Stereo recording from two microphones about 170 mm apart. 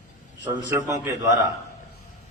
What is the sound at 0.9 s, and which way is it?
Speech, 20° right (ahead or behind).